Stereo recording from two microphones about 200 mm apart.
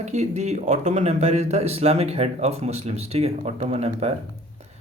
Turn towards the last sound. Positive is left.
turn(degrees=-30)  # may be behind; listen again after turning